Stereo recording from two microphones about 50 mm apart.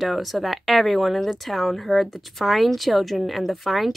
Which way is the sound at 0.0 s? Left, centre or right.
Centre.